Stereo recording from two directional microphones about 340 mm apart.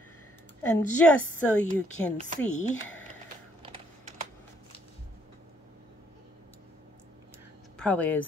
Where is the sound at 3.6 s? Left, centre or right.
Centre.